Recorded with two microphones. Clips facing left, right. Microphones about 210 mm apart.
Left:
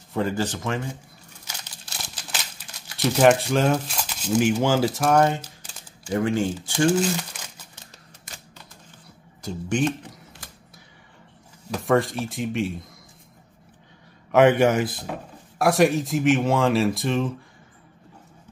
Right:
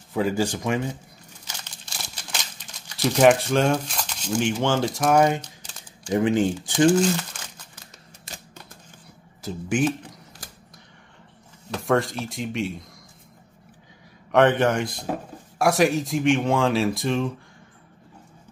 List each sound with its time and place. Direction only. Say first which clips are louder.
0.1 s speech: right 2 dB; 10° right (ahead or behind)
1.6 s crumpling: even; centre (ahead or behind)
6.1 s speech: right 2 dB; 20° right (ahead or behind)
6.9 s speech: right 2 dB; 5° left (ahead or behind)
9.4 s speech: right 1 dB; 5° right (ahead or behind)
11.7 s speech: left 1 dB; centre (ahead or behind)
14.3 s speech: left 2 dB; 10° left (ahead or behind)